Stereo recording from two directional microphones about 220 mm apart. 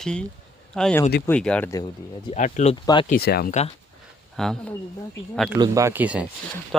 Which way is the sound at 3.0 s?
45° left (ahead or behind).